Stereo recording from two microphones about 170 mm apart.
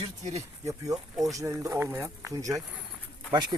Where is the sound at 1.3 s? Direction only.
15° right (ahead or behind).